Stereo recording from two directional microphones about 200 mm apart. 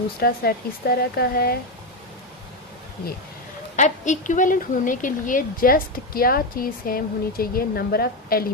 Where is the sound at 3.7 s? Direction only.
35° left (ahead or behind).